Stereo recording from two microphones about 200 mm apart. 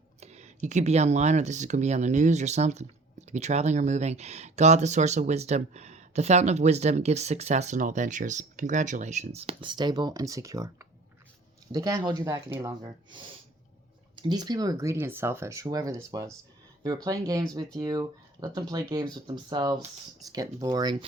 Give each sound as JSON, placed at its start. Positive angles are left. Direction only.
{"t": 0.2, "sound": "speech", "side_deg": -35}